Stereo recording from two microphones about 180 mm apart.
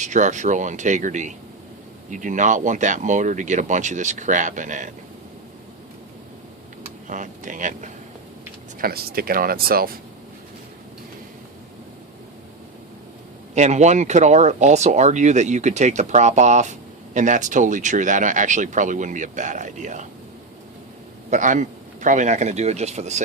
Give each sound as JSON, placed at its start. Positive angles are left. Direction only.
{"t": 0.0, "sound": "speech", "side_deg": -40}
{"t": 7.1, "sound": "speech", "side_deg": -45}
{"t": 8.8, "sound": "speech", "side_deg": -55}
{"t": 13.5, "sound": "speech", "side_deg": -40}
{"t": 21.2, "sound": "speech", "side_deg": -45}